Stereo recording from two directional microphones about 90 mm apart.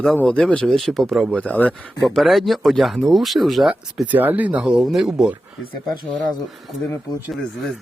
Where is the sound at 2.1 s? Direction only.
Centre (ahead or behind).